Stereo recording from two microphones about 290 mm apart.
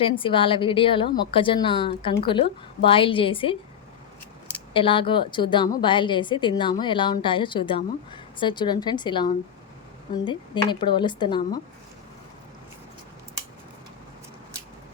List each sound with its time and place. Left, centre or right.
0.0 s a woman's voice: centre
4.7 s a woman's voice: centre